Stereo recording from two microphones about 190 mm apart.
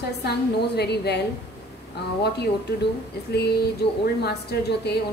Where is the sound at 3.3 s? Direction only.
60° left (ahead or behind).